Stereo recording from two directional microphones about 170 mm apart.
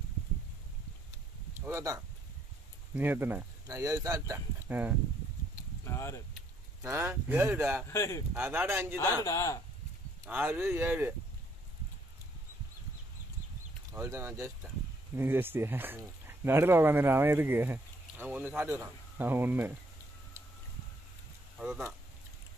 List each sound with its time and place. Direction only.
1.6 s a sound: 15° right (ahead or behind)
2.9 s speech: 10° right (ahead or behind)
5.9 s speech: 15° left (ahead or behind)
6.8 s speech: 15° right (ahead or behind)
7.9 s speech: 15° left (ahead or behind)
8.4 s speech: 10° right (ahead or behind)
9.2 s speech: 15° left (ahead or behind)
10.2 s speech: 10° right (ahead or behind)
13.9 s speech: 15° right (ahead or behind)
21.5 s speech: 5° right (ahead or behind)